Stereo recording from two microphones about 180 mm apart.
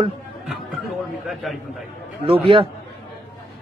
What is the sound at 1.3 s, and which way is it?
Speech, centre (ahead or behind).